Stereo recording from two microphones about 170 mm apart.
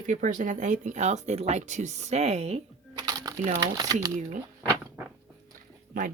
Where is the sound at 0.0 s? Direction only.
50° right (ahead or behind).